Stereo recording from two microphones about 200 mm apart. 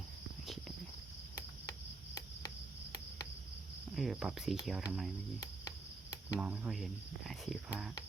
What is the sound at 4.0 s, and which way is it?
Speech, centre (ahead or behind).